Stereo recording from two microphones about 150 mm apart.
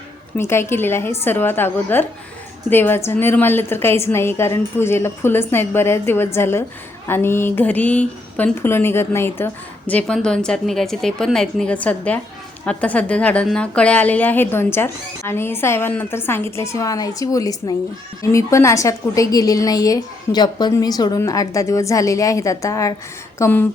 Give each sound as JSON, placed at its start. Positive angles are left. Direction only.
{"t": 0.3, "sound": "a woman's voice", "side_deg": 15}